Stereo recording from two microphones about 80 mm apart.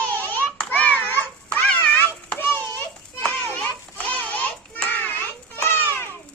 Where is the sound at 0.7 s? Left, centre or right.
Centre.